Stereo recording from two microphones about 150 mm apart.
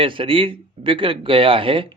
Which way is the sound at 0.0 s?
35° right (ahead or behind).